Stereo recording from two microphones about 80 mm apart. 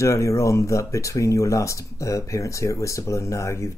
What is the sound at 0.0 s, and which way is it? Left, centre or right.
Speech, left.